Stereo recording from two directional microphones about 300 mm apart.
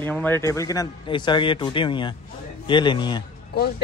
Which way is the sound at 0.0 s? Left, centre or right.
Centre.